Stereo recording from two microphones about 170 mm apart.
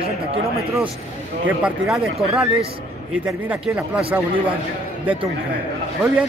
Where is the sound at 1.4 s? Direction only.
5° right (ahead or behind).